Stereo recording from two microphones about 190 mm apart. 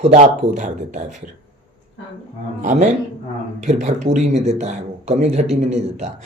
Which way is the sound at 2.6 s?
40° right (ahead or behind).